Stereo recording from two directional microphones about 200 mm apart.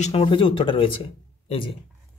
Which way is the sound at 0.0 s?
30° left (ahead or behind).